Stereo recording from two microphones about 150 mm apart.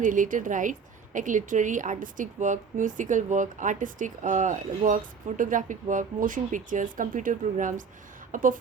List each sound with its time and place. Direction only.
0.0 s a woman's voice: 60° right (ahead or behind)